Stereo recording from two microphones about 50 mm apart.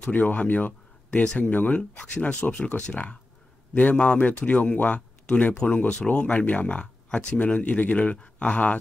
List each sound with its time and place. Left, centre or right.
0.0 s speech: left
1.2 s speech: left